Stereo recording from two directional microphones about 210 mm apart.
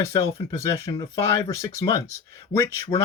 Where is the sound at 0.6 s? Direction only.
15° left (ahead or behind).